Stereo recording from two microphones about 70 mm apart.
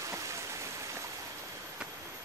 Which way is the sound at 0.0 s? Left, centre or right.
Right.